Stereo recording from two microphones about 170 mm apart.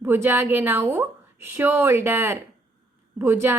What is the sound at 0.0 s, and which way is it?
A woman's voice, 10° right (ahead or behind).